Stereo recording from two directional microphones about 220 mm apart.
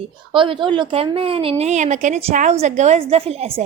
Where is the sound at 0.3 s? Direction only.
20° right (ahead or behind).